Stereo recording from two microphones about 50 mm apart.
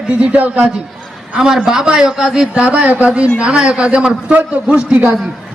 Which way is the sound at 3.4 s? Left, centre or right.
Centre.